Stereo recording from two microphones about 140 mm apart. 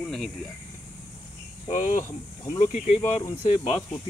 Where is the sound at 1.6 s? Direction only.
60° left (ahead or behind).